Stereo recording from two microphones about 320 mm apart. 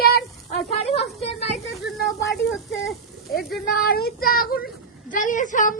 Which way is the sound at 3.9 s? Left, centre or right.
Left.